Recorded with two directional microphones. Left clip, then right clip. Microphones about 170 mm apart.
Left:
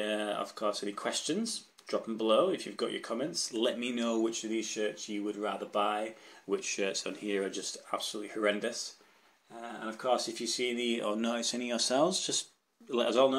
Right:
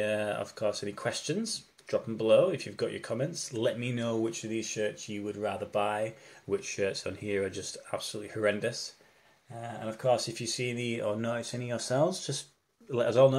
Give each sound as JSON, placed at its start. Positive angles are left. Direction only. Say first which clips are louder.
{"t": 0.0, "sound": "speech", "louder": "right 3 dB", "side_deg": 5}
{"t": 9.8, "sound": "speech", "louder": "right 3 dB", "side_deg": 5}